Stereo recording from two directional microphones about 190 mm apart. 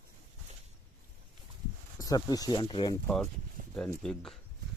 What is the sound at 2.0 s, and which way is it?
Speech, 20° left (ahead or behind).